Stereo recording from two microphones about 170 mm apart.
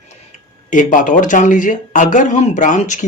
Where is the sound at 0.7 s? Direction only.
50° left (ahead or behind).